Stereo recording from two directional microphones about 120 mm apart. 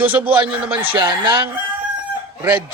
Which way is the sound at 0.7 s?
45° right (ahead or behind).